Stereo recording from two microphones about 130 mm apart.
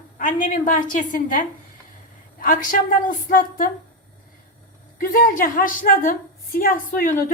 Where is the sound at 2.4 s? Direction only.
90° left.